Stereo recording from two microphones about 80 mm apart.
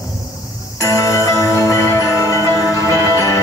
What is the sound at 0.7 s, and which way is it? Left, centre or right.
Music, left.